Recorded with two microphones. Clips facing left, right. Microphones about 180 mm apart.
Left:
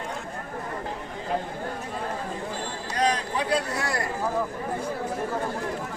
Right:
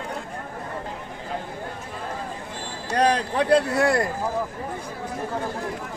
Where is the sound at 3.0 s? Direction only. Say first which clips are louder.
Right 5 dB; 60° right (ahead or behind).